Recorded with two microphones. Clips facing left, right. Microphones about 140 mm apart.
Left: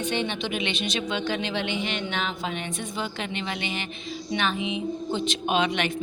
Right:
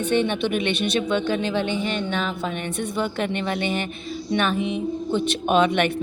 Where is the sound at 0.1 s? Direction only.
55° right (ahead or behind).